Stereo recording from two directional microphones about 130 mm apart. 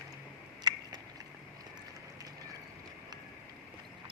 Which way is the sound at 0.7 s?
30° right (ahead or behind).